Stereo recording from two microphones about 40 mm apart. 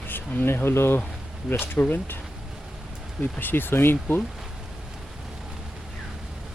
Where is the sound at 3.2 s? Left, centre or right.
Left.